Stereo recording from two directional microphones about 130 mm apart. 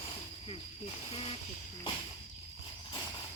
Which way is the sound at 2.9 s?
35° left (ahead or behind).